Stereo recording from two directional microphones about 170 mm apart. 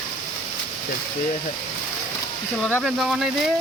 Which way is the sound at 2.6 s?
Centre (ahead or behind).